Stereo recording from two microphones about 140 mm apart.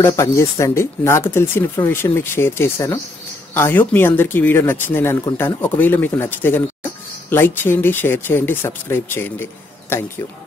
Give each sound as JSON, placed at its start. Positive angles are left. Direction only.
{"t": 0.0, "sound": "speech", "side_deg": 20}